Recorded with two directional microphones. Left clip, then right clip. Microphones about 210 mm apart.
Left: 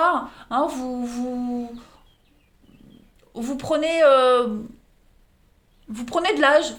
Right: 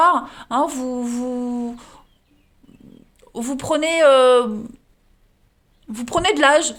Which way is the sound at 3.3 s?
40° right (ahead or behind).